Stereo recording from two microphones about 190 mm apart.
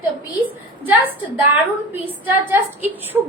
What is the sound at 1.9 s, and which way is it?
Speech, 10° right (ahead or behind).